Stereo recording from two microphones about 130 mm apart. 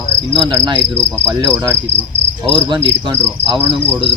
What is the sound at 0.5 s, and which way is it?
Insect, 30° right (ahead or behind).